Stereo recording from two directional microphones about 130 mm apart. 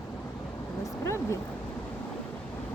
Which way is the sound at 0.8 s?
20° left (ahead or behind).